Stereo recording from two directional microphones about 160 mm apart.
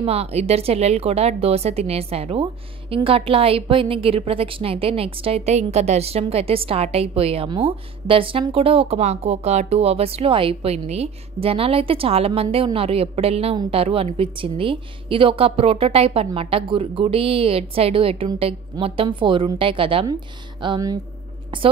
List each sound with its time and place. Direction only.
0.0 s a woman's voice: 40° right (ahead or behind)